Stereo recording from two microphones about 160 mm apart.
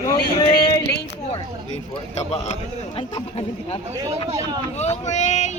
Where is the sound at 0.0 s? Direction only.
25° left (ahead or behind).